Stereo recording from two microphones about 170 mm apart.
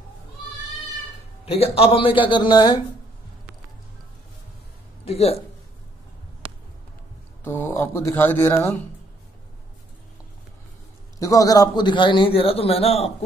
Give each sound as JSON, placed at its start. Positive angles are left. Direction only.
{"t": 1.4, "sound": "a man's voice", "side_deg": 35}
{"t": 5.0, "sound": "speech", "side_deg": 35}
{"t": 7.4, "sound": "speech", "side_deg": 15}
{"t": 11.1, "sound": "a man's voice", "side_deg": 20}